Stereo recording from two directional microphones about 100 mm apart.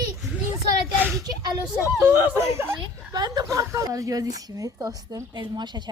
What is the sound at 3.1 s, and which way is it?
A woman's voice, 40° right (ahead or behind).